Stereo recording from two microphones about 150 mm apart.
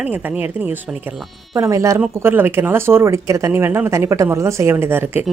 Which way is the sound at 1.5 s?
20° right (ahead or behind).